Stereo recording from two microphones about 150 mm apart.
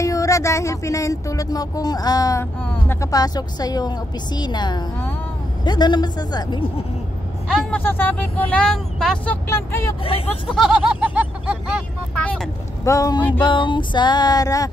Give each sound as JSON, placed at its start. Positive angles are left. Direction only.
{"t": 0.0, "sound": "speech", "side_deg": 20}
{"t": 7.7, "sound": "speech", "side_deg": 15}
{"t": 10.5, "sound": "a sound", "side_deg": 0}
{"t": 12.2, "sound": "vehicle", "side_deg": 5}
{"t": 12.8, "sound": "speech", "side_deg": 20}
{"t": 13.4, "sound": "speech", "side_deg": 35}